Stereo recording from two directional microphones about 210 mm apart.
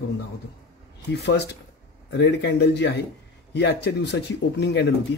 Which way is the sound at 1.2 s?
50° left (ahead or behind).